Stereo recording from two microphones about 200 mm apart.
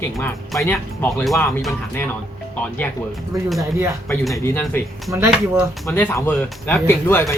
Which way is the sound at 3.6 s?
15° right (ahead or behind).